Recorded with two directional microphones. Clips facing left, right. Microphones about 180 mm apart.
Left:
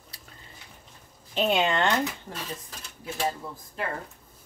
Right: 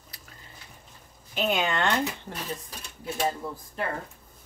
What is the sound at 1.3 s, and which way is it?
Speech, 25° left (ahead or behind).